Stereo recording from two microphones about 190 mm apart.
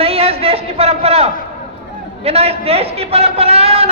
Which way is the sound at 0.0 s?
30° right (ahead or behind).